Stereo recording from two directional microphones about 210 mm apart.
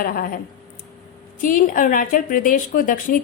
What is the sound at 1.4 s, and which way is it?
A woman's voice, 40° left (ahead or behind).